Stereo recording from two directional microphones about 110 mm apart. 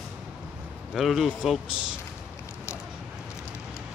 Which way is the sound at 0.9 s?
Centre (ahead or behind).